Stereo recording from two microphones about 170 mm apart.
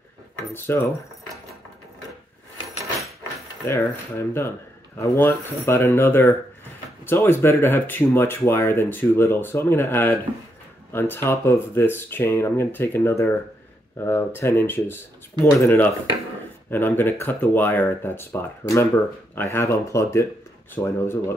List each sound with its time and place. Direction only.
0.5 s speech: 15° left (ahead or behind)
3.6 s speech: 15° left (ahead or behind)